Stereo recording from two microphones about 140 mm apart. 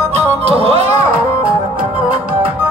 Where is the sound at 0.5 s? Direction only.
45° right (ahead or behind).